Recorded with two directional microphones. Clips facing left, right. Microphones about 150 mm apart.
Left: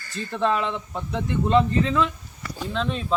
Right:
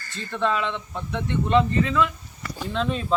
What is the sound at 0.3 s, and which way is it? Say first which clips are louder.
A man's voice: left 1 dB; 35° left (ahead or behind).